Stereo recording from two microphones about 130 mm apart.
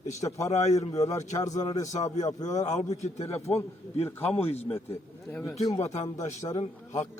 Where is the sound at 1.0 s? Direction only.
25° left (ahead or behind).